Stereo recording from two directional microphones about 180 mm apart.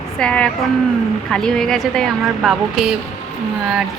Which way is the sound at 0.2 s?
5° left (ahead or behind).